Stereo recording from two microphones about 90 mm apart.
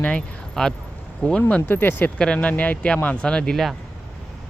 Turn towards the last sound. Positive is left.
turn(degrees=5)  # may be behind; listen again after turning